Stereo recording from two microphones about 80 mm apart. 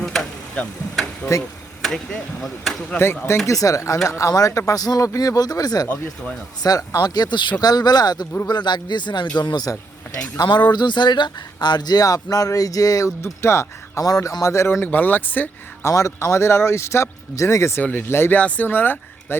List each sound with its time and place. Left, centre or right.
0.0 s tick-tock: centre
1.8 s speech: centre
3.4 s speech: left
7.6 s speech: left
9.4 s speech: left
13.2 s speech: left
14.0 s speech: left
14.4 s speech: left
15.8 s speech: left